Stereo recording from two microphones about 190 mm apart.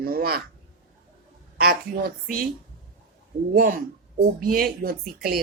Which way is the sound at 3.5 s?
50° right (ahead or behind).